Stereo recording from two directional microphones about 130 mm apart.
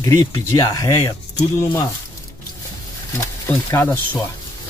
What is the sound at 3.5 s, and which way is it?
Speech, 15° left (ahead or behind).